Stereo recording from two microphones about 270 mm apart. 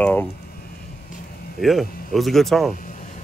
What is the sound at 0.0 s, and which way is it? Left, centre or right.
Speech, centre.